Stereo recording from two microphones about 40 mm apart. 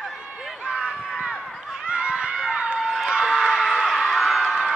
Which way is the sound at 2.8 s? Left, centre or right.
Centre.